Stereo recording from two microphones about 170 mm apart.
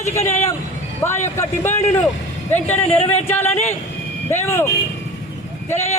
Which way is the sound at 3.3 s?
15° left (ahead or behind).